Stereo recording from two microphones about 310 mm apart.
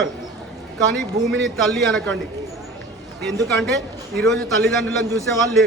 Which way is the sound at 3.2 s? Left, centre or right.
Centre.